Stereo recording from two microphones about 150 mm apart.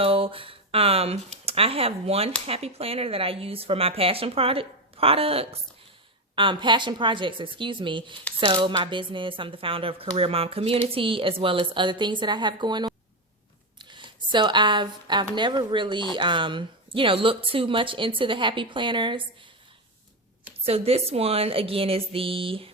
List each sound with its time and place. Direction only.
0.0 s speech: 40° right (ahead or behind)
20.7 s speech: 40° right (ahead or behind)